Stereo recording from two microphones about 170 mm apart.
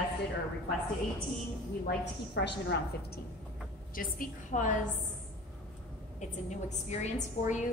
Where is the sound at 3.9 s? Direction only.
55° left (ahead or behind).